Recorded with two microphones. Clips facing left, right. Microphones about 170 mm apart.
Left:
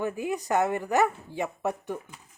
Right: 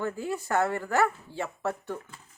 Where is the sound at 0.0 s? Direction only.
15° left (ahead or behind).